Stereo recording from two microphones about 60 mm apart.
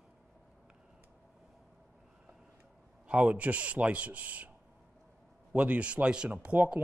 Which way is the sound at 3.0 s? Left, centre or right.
Right.